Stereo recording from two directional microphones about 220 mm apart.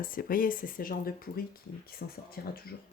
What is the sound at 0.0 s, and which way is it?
Speech, 40° left (ahead or behind).